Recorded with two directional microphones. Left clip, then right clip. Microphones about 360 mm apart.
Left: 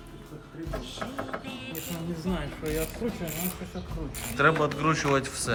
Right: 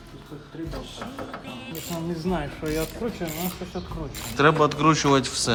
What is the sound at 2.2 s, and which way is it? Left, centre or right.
Speech, centre.